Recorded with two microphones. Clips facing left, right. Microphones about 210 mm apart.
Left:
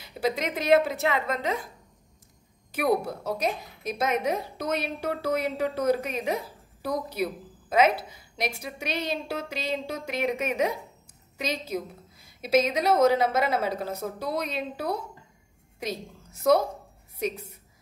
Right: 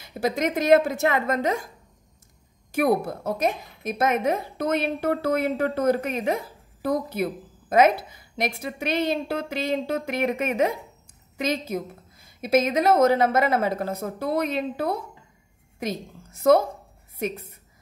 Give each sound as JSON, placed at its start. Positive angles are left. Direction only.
{"t": 0.0, "sound": "a woman's voice", "side_deg": -45}
{"t": 2.7, "sound": "a woman's voice", "side_deg": -50}